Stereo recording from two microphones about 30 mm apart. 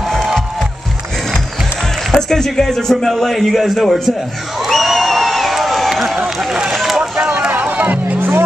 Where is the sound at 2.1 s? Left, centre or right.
Centre.